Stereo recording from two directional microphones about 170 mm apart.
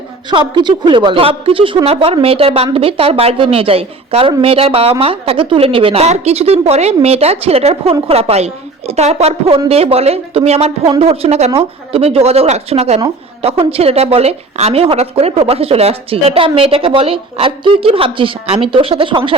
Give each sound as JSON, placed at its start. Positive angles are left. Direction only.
{"t": 0.3, "sound": "a woman's voice", "side_deg": -25}